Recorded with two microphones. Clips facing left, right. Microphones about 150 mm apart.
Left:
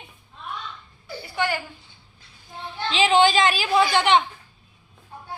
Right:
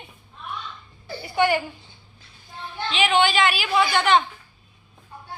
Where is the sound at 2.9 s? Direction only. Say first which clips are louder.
Left 3 dB; 30° left (ahead or behind).